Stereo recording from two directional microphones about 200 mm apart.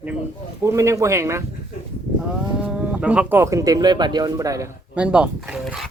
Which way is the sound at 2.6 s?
5° right (ahead or behind).